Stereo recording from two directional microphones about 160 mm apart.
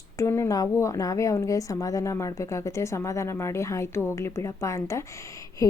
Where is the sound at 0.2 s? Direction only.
20° left (ahead or behind).